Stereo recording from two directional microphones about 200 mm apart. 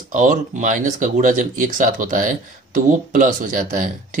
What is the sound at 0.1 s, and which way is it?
Speech, 40° right (ahead or behind).